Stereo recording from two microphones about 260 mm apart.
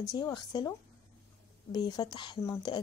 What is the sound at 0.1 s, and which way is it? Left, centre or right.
A woman's voice, centre.